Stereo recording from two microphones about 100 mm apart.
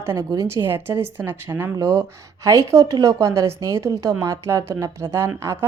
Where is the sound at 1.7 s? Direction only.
40° right (ahead or behind).